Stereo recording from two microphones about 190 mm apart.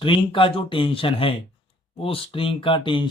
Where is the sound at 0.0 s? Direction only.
25° left (ahead or behind).